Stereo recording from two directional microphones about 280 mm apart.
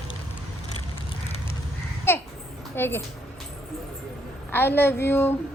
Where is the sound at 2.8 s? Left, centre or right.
Centre.